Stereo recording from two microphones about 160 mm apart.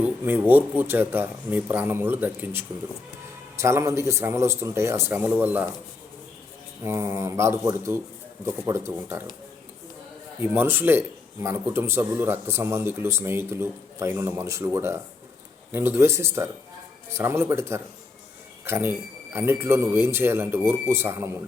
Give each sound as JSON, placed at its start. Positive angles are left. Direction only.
{"t": 0.0, "sound": "speech", "side_deg": -15}
{"t": 6.8, "sound": "speech", "side_deg": -15}
{"t": 10.4, "sound": "speech", "side_deg": -15}